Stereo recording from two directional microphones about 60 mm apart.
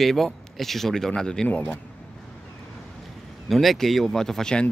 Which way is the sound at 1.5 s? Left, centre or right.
Left.